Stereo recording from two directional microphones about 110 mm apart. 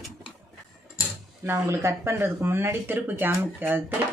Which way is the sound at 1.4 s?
25° right (ahead or behind).